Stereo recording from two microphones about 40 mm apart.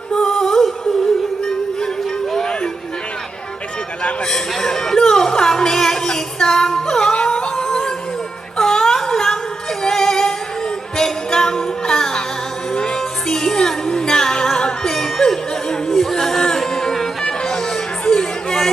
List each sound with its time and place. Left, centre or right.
0.1 s music: centre
4.3 s music: centre
8.5 s a sound: centre
9.8 s music: centre
15.9 s a sound: centre
17.2 s music: centre
18.0 s chatter: centre